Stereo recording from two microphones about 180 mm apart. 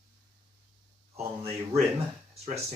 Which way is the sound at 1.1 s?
35° right (ahead or behind).